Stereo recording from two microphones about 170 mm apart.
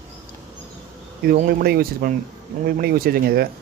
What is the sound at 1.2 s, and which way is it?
Speech, 65° right (ahead or behind).